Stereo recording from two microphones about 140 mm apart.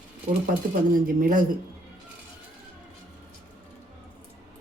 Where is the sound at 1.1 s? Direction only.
85° right.